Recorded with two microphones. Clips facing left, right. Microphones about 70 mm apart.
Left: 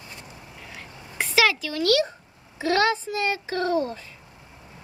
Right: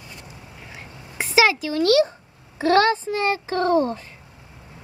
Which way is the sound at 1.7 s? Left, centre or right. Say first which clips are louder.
Right 4 dB; right.